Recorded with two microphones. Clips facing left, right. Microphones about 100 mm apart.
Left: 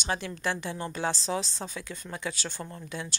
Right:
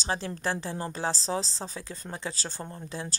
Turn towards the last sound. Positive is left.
turn(degrees=-30)  # may be behind; listen again after turning